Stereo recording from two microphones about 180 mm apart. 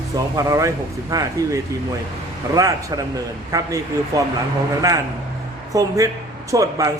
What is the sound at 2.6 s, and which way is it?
Speech, 20° right (ahead or behind).